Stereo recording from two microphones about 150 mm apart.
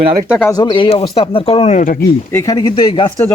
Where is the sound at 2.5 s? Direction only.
25° left (ahead or behind).